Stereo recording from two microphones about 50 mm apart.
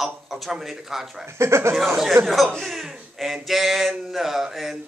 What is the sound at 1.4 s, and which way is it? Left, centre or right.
Speech, right.